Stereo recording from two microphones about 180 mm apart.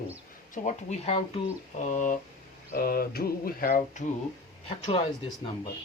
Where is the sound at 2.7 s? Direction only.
55° left (ahead or behind).